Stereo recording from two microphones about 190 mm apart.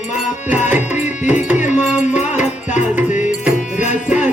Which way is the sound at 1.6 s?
40° left (ahead or behind).